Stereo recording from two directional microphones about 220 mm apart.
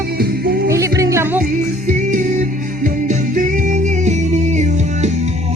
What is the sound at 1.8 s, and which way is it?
Music, 35° right (ahead or behind).